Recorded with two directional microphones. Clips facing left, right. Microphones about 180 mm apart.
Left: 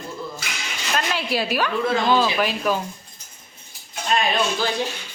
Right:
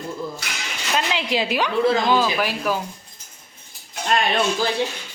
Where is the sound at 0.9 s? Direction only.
20° right (ahead or behind).